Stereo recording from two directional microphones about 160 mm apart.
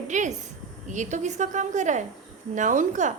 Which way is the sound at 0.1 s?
50° right (ahead or behind).